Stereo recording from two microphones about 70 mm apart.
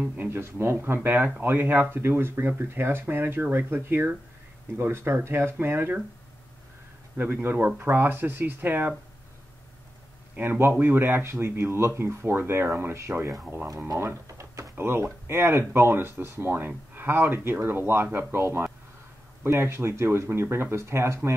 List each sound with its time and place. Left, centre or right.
0.3 s speech: right
7.4 s speech: right
10.3 s speech: right
14.2 s drawer open or close: right
14.8 s speech: right